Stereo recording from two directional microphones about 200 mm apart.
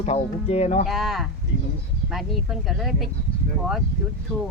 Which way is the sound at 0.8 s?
Centre (ahead or behind).